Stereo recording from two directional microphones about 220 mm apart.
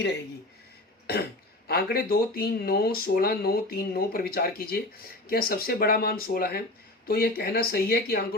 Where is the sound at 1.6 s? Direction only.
45° left (ahead or behind).